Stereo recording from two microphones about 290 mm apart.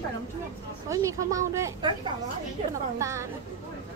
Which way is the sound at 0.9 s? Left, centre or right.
Centre.